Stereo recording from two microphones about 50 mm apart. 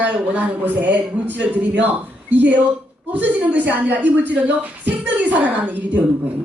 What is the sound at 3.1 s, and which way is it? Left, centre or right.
A woman's voice, right.